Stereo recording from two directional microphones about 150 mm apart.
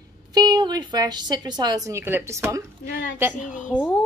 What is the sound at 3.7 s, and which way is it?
Speech, centre (ahead or behind).